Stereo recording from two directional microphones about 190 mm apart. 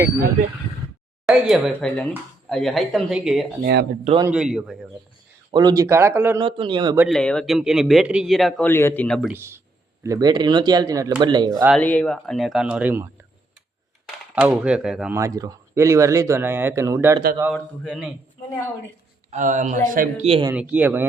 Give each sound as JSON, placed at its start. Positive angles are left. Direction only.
{"t": 1.3, "sound": "a man's voice", "side_deg": 0}
{"t": 3.6, "sound": "speech", "side_deg": -60}
{"t": 4.3, "sound": "a man's voice", "side_deg": -5}
{"t": 5.5, "sound": "speech", "side_deg": -20}
{"t": 6.4, "sound": "speech", "side_deg": -25}
{"t": 7.1, "sound": "a man's voice", "side_deg": 5}
{"t": 10.0, "sound": "speech", "side_deg": -20}
{"t": 11.5, "sound": "a man's voice", "side_deg": 0}
{"t": 14.3, "sound": "a man's voice", "side_deg": -5}
{"t": 15.2, "sound": "speech", "side_deg": -20}
{"t": 17.5, "sound": "a man's voice", "side_deg": 0}
{"t": 19.3, "sound": "speech", "side_deg": -40}
{"t": 20.2, "sound": "speech", "side_deg": -30}
{"t": 20.5, "sound": "speech", "side_deg": -5}